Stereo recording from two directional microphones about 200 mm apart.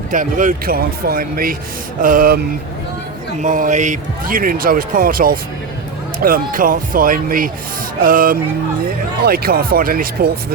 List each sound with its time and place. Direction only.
0.1 s a man's voice: 40° right (ahead or behind)
3.4 s a man's voice: 40° right (ahead or behind)